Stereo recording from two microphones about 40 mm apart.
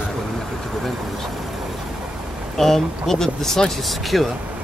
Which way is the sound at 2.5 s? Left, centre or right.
Centre.